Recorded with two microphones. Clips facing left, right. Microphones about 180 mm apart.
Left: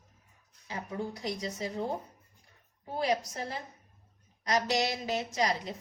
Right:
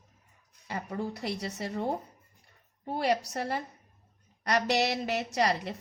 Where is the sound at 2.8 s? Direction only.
75° right (ahead or behind).